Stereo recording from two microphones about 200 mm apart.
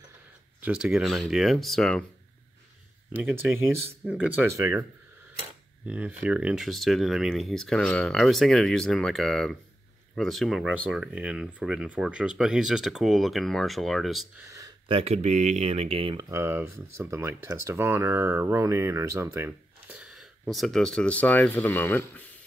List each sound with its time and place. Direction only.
0.6 s speech: 5° right (ahead or behind)
3.1 s speech: 10° right (ahead or behind)
5.9 s speech: 5° right (ahead or behind)
14.9 s speech: 30° right (ahead or behind)
16.3 s speech: 15° right (ahead or behind); by 22.2 s 10° left (ahead or behind)